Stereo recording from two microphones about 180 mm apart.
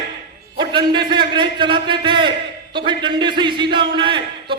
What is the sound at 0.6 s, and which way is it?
A man's voice, 25° right (ahead or behind).